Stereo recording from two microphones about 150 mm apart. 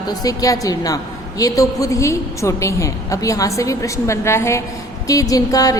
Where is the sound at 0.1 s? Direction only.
25° left (ahead or behind).